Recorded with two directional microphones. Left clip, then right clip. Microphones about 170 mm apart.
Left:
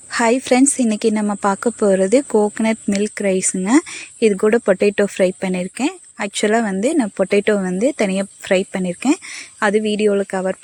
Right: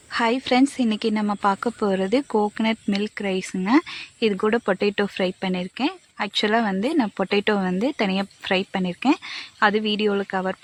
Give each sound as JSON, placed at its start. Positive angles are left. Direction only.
{"t": 0.1, "sound": "a woman's voice", "side_deg": 30}